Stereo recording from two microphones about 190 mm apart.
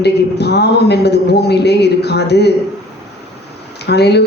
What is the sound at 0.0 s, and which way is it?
Speech, 60° left (ahead or behind).